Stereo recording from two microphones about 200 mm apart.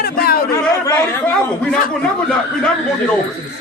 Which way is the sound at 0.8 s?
10° left (ahead or behind).